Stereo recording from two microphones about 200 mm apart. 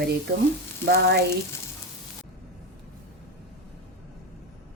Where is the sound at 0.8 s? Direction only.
50° right (ahead or behind).